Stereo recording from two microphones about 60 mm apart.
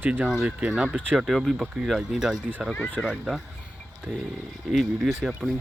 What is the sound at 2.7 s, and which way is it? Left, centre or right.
Speech, left.